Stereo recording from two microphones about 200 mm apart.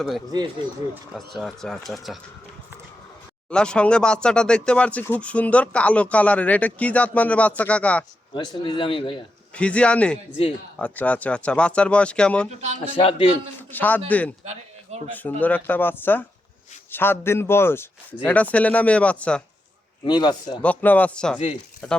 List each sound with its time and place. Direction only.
1.1 s speech: centre (ahead or behind)
3.5 s speech: 5° left (ahead or behind)
8.3 s a man's voice: 25° left (ahead or behind)
9.6 s speech: 5° left (ahead or behind)
12.5 s speech: 35° right (ahead or behind)
13.0 s a man's voice: 30° left (ahead or behind)
13.6 s a man's voice: 10° left (ahead or behind)
14.4 s a sound: 30° right (ahead or behind)
15.1 s speech: 10° left (ahead or behind)
20.1 s a man's voice: 20° left (ahead or behind)
20.6 s speech: 5° left (ahead or behind)